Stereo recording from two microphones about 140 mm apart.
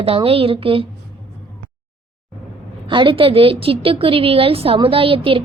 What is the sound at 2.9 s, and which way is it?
A woman's voice, 35° right (ahead or behind).